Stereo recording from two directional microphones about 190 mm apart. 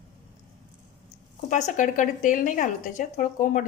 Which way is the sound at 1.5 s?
40° left (ahead or behind).